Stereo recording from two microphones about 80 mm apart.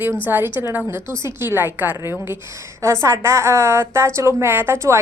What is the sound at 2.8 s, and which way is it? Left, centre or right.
A woman's voice, right.